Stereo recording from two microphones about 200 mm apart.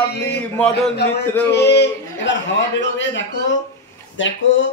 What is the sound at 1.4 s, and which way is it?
Speech, 55° left (ahead or behind).